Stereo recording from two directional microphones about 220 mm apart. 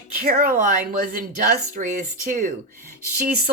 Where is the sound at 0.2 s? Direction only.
40° right (ahead or behind).